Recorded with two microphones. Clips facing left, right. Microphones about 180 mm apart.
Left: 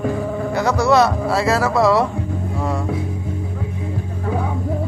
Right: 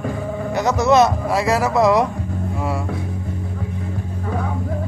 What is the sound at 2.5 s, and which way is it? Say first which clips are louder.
Music: left 1 dB; 5° right (ahead or behind).